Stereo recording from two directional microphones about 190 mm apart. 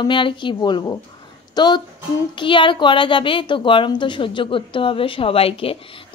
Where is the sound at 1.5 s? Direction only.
20° left (ahead or behind).